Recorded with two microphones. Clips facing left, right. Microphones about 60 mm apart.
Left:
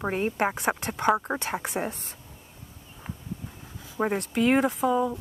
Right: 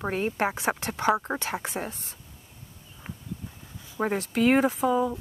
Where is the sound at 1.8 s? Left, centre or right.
Left.